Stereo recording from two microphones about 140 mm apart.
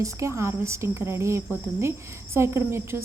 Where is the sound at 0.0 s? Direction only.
20° right (ahead or behind).